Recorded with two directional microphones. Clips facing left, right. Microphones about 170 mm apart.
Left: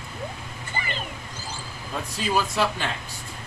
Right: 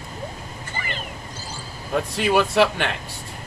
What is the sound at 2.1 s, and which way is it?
Speech, 65° right (ahead or behind).